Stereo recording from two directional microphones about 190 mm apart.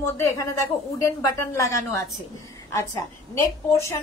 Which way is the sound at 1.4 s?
15° left (ahead or behind).